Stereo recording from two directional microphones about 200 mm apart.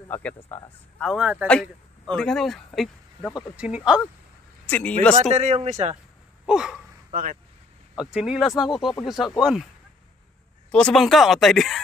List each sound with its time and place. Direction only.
0.1 s speech: 10° left (ahead or behind)
4.6 s speech: 10° left (ahead or behind)
5.3 s speech: 35° right (ahead or behind)
6.4 s speech: 5° right (ahead or behind)
7.1 s speech: 40° right (ahead or behind)
8.0 s speech: 5° right (ahead or behind)
10.7 s speech: 5° left (ahead or behind)